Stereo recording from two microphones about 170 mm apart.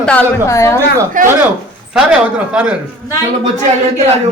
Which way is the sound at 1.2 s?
50° right (ahead or behind).